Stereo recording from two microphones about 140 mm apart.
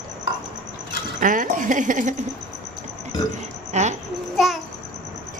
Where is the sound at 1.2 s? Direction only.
70° right (ahead or behind).